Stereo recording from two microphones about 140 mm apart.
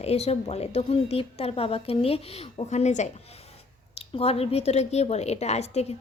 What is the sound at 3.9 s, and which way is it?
A woman's voice, 45° left (ahead or behind).